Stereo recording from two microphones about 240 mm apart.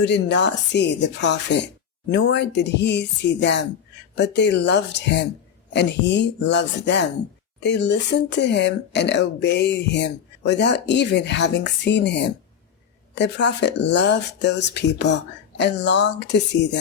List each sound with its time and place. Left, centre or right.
0.0 s speech: left